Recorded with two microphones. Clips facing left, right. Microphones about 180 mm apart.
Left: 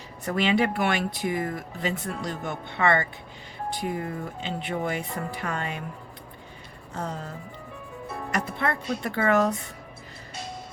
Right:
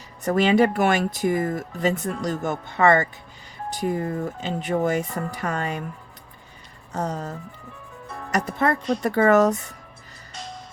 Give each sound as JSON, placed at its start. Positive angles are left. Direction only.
{"t": 0.3, "sound": "speech", "side_deg": -45}
{"t": 6.9, "sound": "speech", "side_deg": -40}